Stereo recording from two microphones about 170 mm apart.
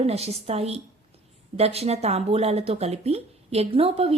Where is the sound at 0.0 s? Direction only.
35° right (ahead or behind).